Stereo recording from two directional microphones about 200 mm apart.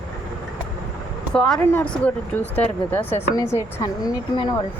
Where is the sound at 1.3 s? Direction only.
Centre (ahead or behind).